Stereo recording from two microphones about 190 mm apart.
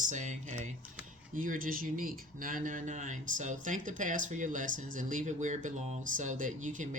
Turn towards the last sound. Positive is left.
turn(degrees=-45)  # may be behind; listen again after turning